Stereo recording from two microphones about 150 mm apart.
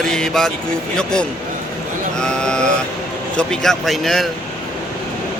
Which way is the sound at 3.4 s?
5° left (ahead or behind).